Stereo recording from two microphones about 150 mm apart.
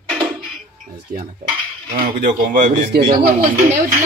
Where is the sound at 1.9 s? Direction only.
60° right (ahead or behind); by 3.3 s 75° right (ahead or behind).